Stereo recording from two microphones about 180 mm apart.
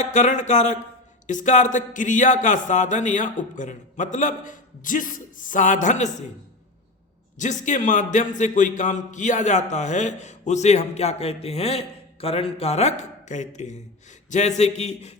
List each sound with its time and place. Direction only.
0.0 s a man's voice: 40° left (ahead or behind)
7.3 s a man's voice: 45° left (ahead or behind)